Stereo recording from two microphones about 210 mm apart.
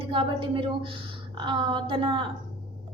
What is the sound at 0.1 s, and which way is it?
A woman's voice, 25° right (ahead or behind).